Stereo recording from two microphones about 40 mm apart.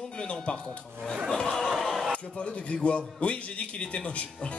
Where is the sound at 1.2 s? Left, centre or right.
Centre.